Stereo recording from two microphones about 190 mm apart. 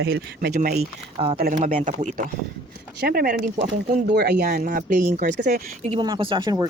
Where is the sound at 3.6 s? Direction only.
35° right (ahead or behind).